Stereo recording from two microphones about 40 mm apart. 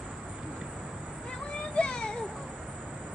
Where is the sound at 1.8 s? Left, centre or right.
Left.